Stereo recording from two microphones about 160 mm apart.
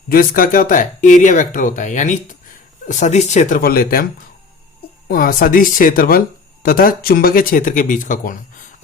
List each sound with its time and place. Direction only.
0.1 s speech: 65° left (ahead or behind)
5.0 s speech: 65° left (ahead or behind)